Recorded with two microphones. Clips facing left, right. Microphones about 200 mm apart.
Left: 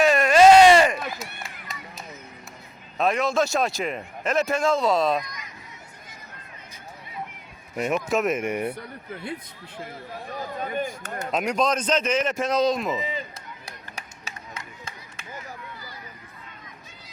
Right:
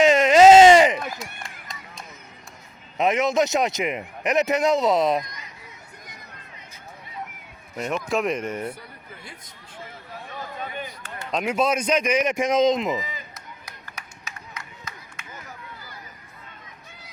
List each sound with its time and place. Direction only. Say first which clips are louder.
0.0 s a sound: right 2 dB; 20° right (ahead or behind)
1.4 s run: left 1 dB; 5° left (ahead or behind)
3.0 s a man's voice: right 2 dB; 20° right (ahead or behind)
7.8 s speech: left 1 dB; 5° left (ahead or behind)
10.2 s speech: left 3 dB; 45° left (ahead or behind)
11.3 s a man's voice: right 1 dB; centre (ahead or behind); by 13.0 s 20° right (ahead or behind)
13.0 s speech: left 4 dB; 30° left (ahead or behind)
13.7 s a sound: left 2 dB; 30° left (ahead or behind)